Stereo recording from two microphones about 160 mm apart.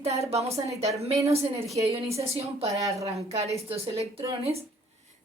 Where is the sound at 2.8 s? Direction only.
20° right (ahead or behind).